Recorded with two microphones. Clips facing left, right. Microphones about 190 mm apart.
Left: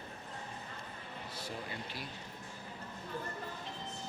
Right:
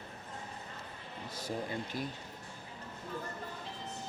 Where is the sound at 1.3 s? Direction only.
40° right (ahead or behind).